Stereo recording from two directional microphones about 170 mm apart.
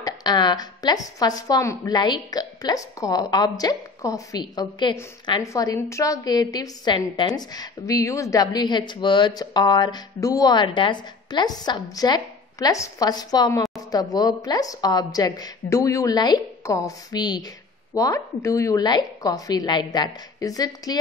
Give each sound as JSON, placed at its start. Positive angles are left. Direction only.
{"t": 0.0, "sound": "a woman's voice", "side_deg": 25}